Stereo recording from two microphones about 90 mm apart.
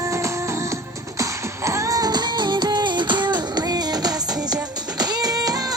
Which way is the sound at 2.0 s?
50° right (ahead or behind).